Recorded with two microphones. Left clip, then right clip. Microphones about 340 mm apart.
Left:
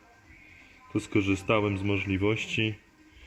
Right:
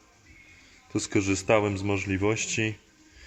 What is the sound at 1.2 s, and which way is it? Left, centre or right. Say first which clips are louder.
Speech: right 3 dB; centre.